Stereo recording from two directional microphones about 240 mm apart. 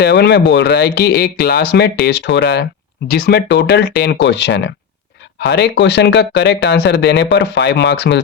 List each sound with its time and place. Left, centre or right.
0.0 s speech: left